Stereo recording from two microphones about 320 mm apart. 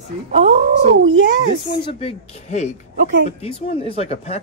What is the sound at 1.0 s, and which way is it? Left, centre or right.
Speech, right.